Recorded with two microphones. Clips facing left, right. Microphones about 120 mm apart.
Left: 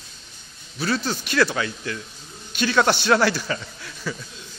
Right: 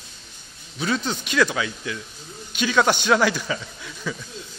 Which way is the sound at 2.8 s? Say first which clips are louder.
Even; 15° right (ahead or behind).